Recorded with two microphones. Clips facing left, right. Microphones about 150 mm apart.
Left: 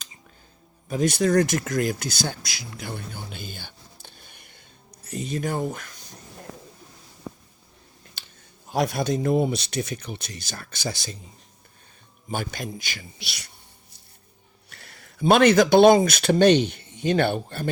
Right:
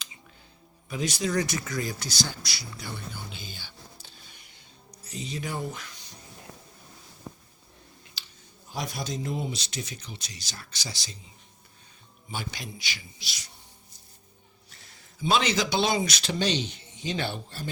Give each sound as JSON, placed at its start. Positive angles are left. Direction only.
{"t": 0.9, "sound": "speech", "side_deg": 50}
{"t": 4.0, "sound": "music", "side_deg": 55}
{"t": 5.0, "sound": "speech", "side_deg": 50}
{"t": 6.5, "sound": "a sound", "side_deg": 90}
{"t": 8.2, "sound": "a sound", "side_deg": 50}
{"t": 8.7, "sound": "speech", "side_deg": 60}
{"t": 12.3, "sound": "speech", "side_deg": 50}
{"t": 14.7, "sound": "a sound", "side_deg": 65}
{"t": 15.2, "sound": "speech", "side_deg": 55}